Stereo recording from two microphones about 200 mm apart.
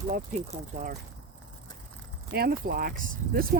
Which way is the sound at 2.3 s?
50° right (ahead or behind).